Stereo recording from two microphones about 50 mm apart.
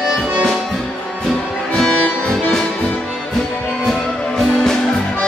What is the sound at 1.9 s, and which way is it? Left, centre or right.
Music, left.